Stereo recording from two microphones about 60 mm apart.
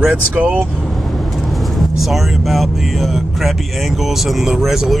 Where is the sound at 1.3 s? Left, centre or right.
Centre.